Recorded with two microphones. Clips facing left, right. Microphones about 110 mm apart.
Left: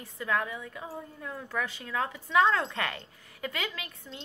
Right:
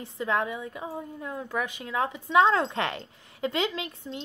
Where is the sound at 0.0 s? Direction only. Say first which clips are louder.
Right 3 dB; 20° right (ahead or behind).